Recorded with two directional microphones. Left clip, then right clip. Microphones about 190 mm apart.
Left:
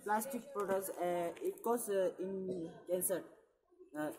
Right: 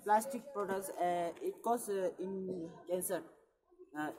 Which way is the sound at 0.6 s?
Centre (ahead or behind).